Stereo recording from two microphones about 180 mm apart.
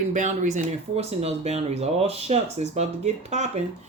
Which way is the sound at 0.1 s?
40° right (ahead or behind).